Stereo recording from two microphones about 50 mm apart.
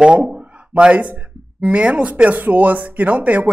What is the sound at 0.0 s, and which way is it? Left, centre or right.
Speech, centre.